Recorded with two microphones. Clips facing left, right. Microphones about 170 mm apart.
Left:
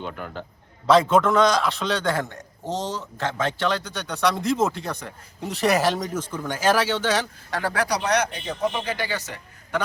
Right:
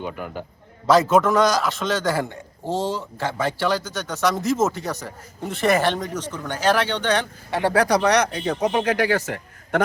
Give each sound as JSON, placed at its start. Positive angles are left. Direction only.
{"t": 0.0, "sound": "a man's voice", "side_deg": -10}
{"t": 2.6, "sound": "speech", "side_deg": 20}
{"t": 2.9, "sound": "speech", "side_deg": -10}
{"t": 7.8, "sound": "speech", "side_deg": -50}